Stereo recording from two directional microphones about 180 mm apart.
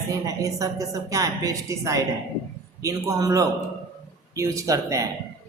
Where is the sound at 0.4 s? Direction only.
20° right (ahead or behind).